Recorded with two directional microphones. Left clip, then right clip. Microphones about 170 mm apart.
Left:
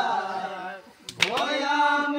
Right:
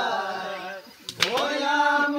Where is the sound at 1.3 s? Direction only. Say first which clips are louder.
Right 3 dB; 10° left (ahead or behind).